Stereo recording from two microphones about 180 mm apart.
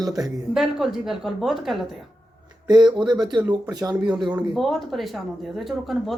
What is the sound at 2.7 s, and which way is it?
Speech, 25° right (ahead or behind).